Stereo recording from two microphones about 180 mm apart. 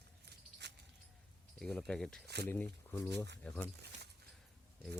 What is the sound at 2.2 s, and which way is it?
Speech, 65° right (ahead or behind).